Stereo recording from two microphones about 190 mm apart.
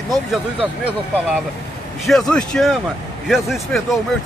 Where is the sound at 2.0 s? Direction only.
Centre (ahead or behind).